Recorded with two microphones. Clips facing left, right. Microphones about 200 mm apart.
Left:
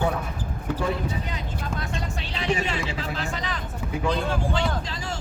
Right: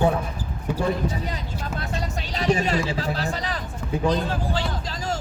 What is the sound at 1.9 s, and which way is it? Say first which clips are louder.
Vehicle: right 2 dB; 40° right (ahead or behind).